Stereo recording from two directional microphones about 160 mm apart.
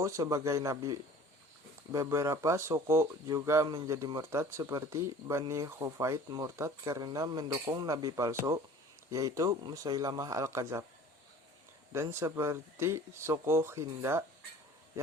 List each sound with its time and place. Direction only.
0.0 s speech: 20° right (ahead or behind)
11.9 s a man's voice: 15° right (ahead or behind)